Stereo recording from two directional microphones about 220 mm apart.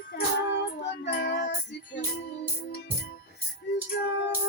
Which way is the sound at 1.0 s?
45° left (ahead or behind).